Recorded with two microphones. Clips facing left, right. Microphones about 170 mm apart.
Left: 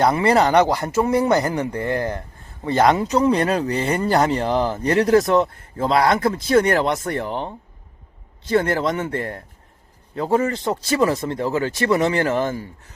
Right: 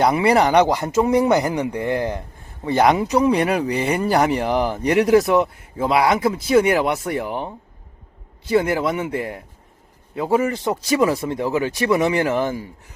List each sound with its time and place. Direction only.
0.0 s speech: 15° right (ahead or behind)